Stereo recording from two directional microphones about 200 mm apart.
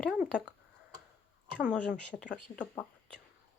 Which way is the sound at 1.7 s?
5° left (ahead or behind).